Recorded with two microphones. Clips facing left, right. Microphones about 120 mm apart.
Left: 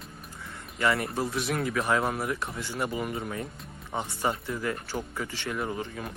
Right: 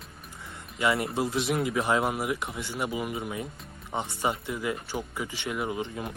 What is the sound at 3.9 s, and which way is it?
Speech, 20° right (ahead or behind).